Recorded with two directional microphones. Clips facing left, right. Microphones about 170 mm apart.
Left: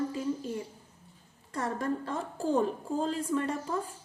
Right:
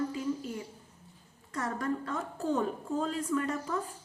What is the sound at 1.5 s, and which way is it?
A woman's voice, 30° left (ahead or behind).